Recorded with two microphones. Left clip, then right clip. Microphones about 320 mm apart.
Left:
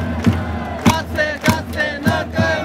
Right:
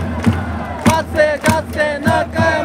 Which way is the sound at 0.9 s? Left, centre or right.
Centre.